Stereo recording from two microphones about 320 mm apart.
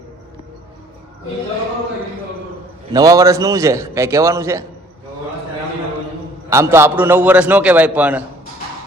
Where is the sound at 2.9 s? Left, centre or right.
Centre.